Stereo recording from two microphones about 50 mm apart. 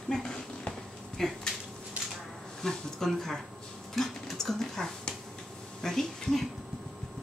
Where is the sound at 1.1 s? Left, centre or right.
Centre.